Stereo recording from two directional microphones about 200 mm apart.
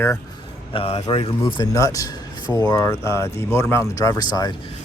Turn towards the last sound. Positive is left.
turn(degrees=20)  # may be behind; listen again after turning